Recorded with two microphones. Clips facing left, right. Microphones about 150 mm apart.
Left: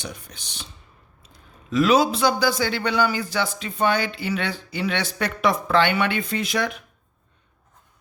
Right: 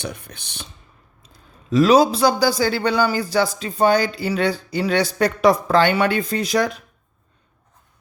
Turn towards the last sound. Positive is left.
turn(degrees=-40)  # may be behind; listen again after turning